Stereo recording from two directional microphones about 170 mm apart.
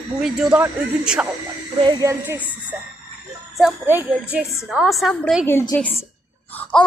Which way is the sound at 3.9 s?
10° right (ahead or behind).